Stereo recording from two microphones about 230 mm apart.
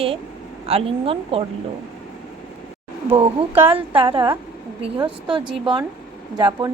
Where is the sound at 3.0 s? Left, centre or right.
Right.